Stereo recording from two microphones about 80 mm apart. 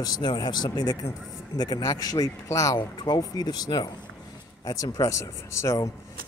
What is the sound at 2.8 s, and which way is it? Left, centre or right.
Speech, left.